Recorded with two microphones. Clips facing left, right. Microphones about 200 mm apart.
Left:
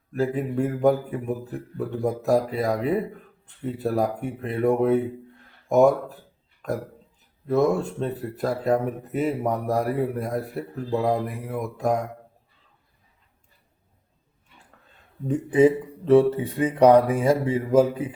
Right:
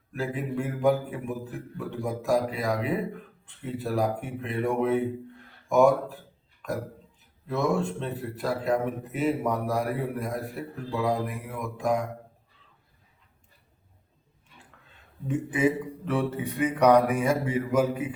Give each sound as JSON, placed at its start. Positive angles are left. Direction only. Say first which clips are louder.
{"t": 0.1, "sound": "speech", "louder": "left 6 dB", "side_deg": 40}
{"t": 7.4, "sound": "speech", "louder": "left 5 dB", "side_deg": 40}
{"t": 15.3, "sound": "speech", "louder": "left 7 dB", "side_deg": 30}